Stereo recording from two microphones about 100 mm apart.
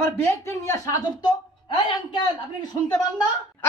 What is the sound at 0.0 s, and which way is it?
Speech, 25° left (ahead or behind).